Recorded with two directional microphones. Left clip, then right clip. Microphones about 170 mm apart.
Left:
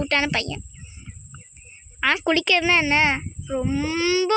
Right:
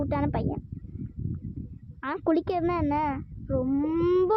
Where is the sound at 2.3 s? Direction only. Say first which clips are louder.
Left 3 dB; 35° left (ahead or behind).